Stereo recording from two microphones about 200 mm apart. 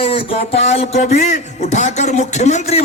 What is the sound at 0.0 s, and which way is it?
Speech, 25° left (ahead or behind).